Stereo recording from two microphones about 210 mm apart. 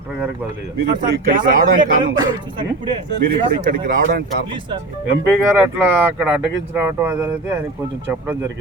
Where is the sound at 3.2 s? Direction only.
45° right (ahead or behind).